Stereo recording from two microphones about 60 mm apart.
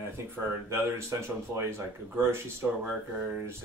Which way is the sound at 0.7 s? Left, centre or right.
Right.